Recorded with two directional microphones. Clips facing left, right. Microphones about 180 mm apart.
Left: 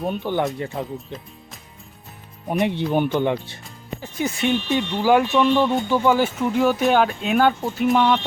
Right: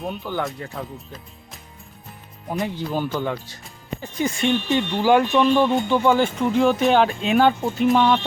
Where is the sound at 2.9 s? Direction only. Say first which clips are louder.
Left 4 dB; 20° left (ahead or behind).